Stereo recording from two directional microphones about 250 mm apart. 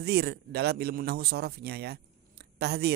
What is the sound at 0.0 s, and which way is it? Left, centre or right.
A man's voice, right.